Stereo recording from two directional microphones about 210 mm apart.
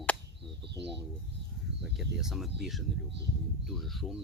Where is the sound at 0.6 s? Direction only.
55° right (ahead or behind).